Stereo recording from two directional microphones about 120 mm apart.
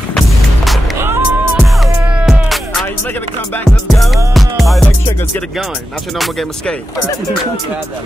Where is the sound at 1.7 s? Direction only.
5° right (ahead or behind).